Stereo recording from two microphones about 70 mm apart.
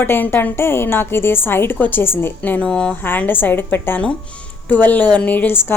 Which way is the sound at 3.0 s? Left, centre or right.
Left.